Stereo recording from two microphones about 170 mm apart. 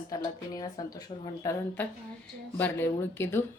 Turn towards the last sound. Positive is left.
turn(degrees=15)  # may be behind; listen again after turning